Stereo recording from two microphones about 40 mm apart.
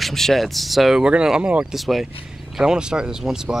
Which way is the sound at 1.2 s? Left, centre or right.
Centre.